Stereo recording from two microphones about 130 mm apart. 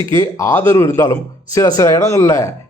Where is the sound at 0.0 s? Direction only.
40° right (ahead or behind).